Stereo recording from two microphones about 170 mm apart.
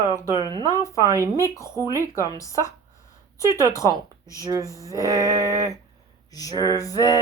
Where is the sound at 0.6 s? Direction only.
20° left (ahead or behind).